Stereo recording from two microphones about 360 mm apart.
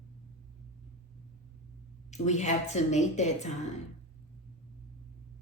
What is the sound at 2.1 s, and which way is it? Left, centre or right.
A woman's voice, centre.